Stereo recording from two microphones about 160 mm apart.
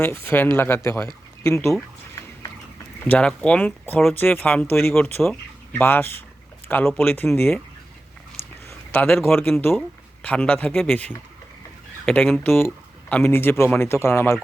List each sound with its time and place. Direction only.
0.0 s speech: 15° left (ahead or behind)
3.1 s speech: 5° left (ahead or behind)
5.8 s speech: 15° left (ahead or behind)
8.4 s a sound: 40° left (ahead or behind)
8.9 s speech: 10° left (ahead or behind)